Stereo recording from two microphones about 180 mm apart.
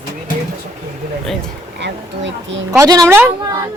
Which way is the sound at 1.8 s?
90° right.